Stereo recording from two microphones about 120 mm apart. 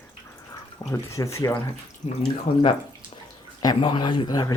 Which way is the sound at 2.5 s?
45° left (ahead or behind).